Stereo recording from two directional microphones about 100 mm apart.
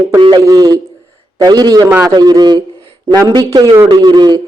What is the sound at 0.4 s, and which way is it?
Speech, 35° right (ahead or behind).